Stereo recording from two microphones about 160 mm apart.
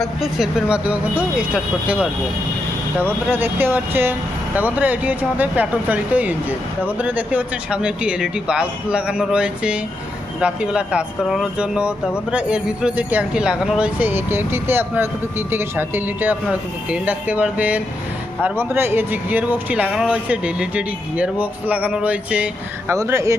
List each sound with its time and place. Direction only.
0.0 s speech: centre (ahead or behind); by 23.3 s 20° right (ahead or behind)